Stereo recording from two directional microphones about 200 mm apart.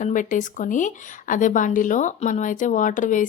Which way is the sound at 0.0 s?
40° left (ahead or behind).